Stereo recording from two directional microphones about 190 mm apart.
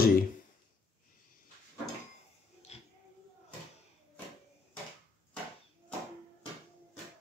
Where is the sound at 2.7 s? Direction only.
35° left (ahead or behind).